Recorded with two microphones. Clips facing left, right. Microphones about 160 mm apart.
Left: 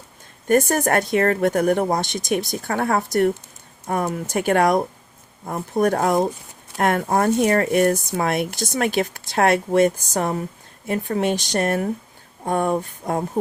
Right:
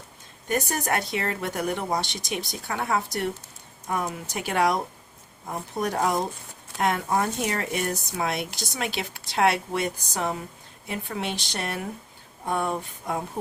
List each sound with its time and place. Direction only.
0.4 s speech: 50° left (ahead or behind)